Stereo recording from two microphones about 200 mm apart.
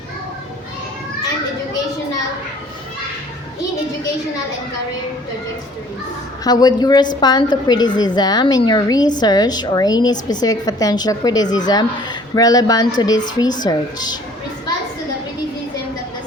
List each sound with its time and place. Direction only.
6.4 s a woman's voice: 20° left (ahead or behind)